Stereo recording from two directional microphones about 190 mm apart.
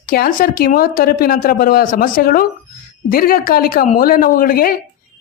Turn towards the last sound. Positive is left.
turn(degrees=50)  # may be behind; listen again after turning